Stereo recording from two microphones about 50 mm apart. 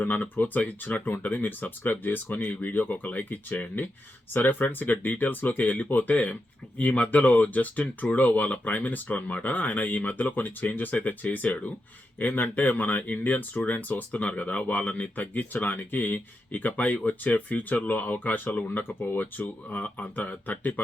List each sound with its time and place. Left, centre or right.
0.0 s speech: left